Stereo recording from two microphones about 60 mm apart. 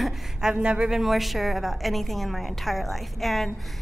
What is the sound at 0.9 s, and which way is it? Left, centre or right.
A woman's voice, centre.